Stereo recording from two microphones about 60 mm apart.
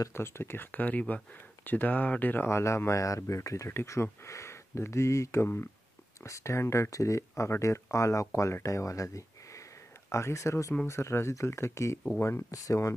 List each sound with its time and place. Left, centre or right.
0.1 s speech: left
2.4 s speech: left
8.6 s a sound: left
10.9 s speech: left
12.4 s speech: left